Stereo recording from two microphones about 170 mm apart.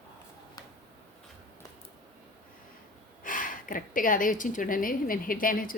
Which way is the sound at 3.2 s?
50° left (ahead or behind).